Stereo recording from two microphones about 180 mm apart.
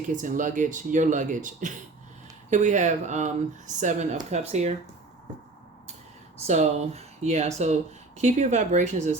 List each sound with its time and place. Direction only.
0.1 s speech: 45° right (ahead or behind)
6.5 s speech: 40° right (ahead or behind)